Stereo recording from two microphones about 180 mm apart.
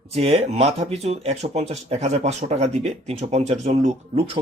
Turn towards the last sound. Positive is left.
turn(degrees=-35)  # may be behind; listen again after turning